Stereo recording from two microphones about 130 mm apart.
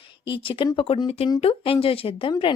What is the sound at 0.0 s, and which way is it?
A woman's voice, 40° left (ahead or behind).